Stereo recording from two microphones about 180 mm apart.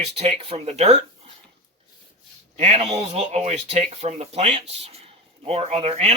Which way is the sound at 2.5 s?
35° right (ahead or behind).